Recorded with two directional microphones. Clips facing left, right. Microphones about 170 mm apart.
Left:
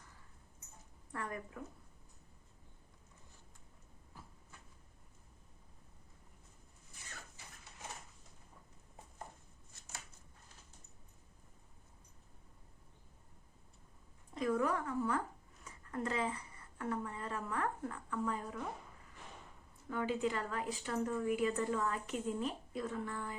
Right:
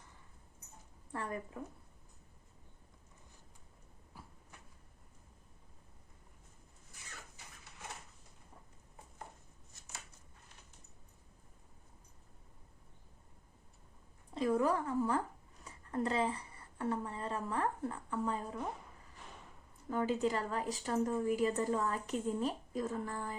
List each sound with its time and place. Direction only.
1.1 s speech: 30° right (ahead or behind)
14.3 s a sound: 30° right (ahead or behind)
15.6 s speech: 30° right (ahead or behind)
19.9 s a woman's voice: 40° right (ahead or behind)